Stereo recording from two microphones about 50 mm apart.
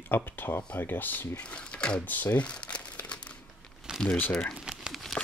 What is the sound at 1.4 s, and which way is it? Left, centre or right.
Speech, left.